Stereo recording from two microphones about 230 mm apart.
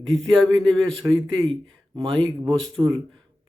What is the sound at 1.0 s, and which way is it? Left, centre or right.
Speech, right.